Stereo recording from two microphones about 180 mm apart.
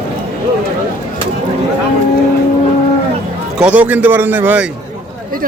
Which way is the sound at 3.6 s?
5° right (ahead or behind).